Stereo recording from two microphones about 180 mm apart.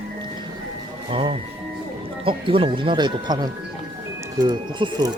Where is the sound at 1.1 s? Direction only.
30° right (ahead or behind).